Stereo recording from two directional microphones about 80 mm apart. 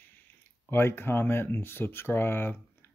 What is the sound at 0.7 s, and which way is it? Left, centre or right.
Speech, left.